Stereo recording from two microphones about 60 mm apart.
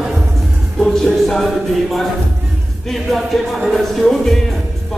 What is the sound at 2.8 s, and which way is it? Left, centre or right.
Speech, centre.